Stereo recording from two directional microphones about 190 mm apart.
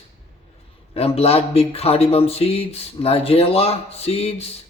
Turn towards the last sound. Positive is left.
turn(degrees=30)  # may be behind; listen again after turning